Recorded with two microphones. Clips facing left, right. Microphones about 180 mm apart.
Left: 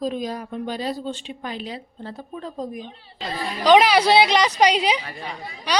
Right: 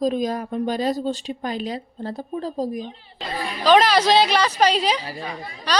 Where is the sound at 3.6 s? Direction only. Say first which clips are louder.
Left 1 dB; 15° left (ahead or behind).